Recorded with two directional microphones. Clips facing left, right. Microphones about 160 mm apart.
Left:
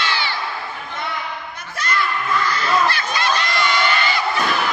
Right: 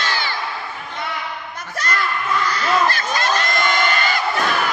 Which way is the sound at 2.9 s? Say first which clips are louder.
Right 1 dB; 45° right (ahead or behind).